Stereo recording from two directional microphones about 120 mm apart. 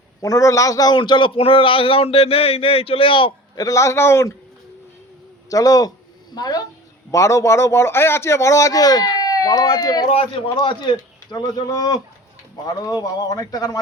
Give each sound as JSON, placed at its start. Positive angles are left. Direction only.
{"t": 0.2, "sound": "a man's voice", "side_deg": 25}
{"t": 3.5, "sound": "a man's voice", "side_deg": 30}
{"t": 5.5, "sound": "a man's voice", "side_deg": 30}
{"t": 10.1, "sound": "a man's voice", "side_deg": 50}